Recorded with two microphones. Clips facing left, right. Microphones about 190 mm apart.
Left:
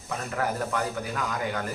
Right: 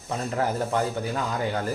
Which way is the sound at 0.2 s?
30° right (ahead or behind).